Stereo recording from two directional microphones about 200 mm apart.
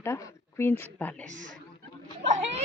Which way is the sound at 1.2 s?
40° right (ahead or behind).